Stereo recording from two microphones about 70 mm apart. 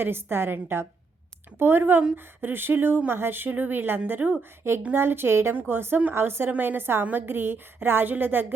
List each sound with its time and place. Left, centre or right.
0.0 s a woman's voice: right